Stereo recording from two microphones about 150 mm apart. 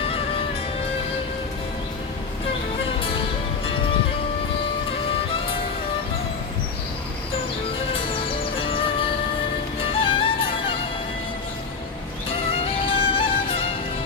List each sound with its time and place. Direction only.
3.0 s music: 35° left (ahead or behind)
7.9 s music: 40° left (ahead or behind)
12.3 s music: 40° left (ahead or behind)